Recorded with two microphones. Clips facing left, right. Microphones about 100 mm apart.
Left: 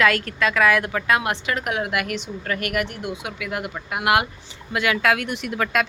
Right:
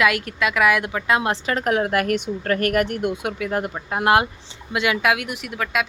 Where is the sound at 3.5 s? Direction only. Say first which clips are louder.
Right 4 dB; 35° right (ahead or behind).